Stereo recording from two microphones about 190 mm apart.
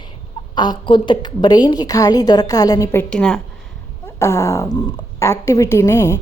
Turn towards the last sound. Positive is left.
turn(degrees=15)  # may be behind; listen again after turning